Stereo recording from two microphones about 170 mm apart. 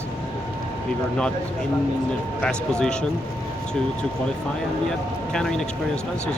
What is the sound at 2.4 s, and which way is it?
Speech, 5° left (ahead or behind).